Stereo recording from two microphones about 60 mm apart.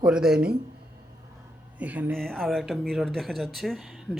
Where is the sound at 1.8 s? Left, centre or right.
Right.